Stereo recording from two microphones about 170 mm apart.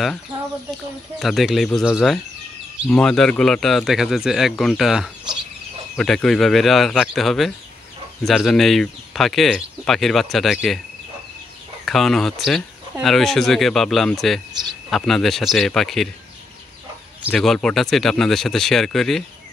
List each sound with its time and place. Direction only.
1.2 s speech: centre (ahead or behind)
11.8 s speech: centre (ahead or behind)
17.3 s speech: 5° left (ahead or behind)